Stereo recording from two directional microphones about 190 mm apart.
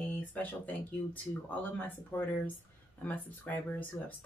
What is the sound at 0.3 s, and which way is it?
Speech, 10° left (ahead or behind).